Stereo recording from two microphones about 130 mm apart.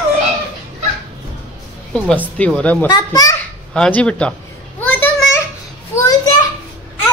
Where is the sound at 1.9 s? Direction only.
10° left (ahead or behind).